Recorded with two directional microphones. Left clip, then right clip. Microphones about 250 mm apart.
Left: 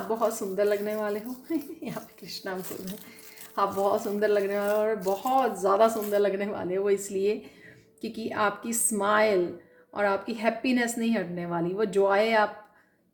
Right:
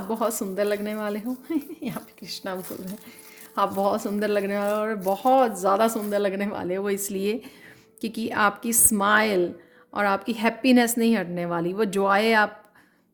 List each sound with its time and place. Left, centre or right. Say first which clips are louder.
0.1 s a woman's voice: right 1 dB; right